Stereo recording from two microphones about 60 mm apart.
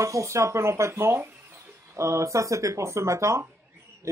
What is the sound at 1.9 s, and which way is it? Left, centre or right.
Speech, right.